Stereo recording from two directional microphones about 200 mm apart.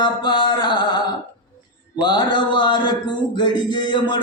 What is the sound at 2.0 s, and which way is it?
Speech, 20° left (ahead or behind).